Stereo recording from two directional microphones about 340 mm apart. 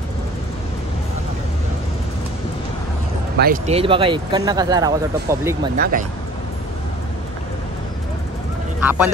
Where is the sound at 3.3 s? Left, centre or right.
Right; by 5.6 s centre.